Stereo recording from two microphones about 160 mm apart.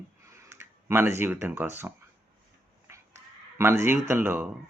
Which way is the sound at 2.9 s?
15° right (ahead or behind).